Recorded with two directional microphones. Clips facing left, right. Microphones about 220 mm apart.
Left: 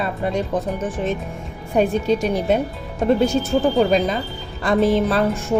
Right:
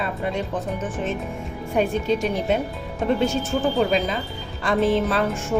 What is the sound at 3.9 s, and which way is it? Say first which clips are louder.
A woman's voice: left 4 dB; 40° left (ahead or behind).